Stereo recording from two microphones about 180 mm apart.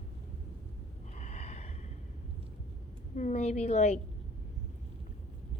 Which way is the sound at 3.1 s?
40° left (ahead or behind).